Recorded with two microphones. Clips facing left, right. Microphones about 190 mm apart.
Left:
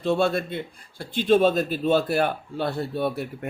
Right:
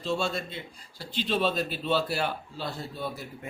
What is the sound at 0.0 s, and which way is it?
A man's voice, 60° left (ahead or behind).